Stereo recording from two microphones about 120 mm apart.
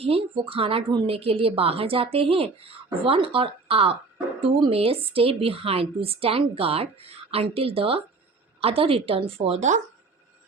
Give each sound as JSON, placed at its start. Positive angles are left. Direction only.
{"t": 0.0, "sound": "a woman's voice", "side_deg": -50}